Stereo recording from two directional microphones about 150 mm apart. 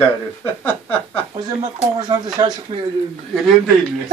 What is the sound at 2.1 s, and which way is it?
Speech, 25° right (ahead or behind).